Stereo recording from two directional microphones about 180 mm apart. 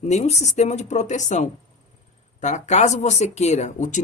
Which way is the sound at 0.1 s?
40° left (ahead or behind).